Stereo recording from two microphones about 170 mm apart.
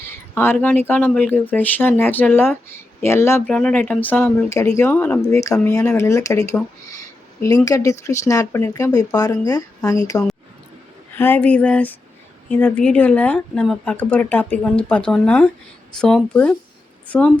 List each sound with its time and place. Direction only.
0.0 s a sound: 15° left (ahead or behind)
0.9 s speech: 10° left (ahead or behind)
11.2 s speech: 10° left (ahead or behind)